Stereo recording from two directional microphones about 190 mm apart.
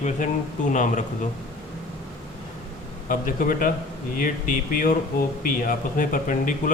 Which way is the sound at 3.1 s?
40° left (ahead or behind).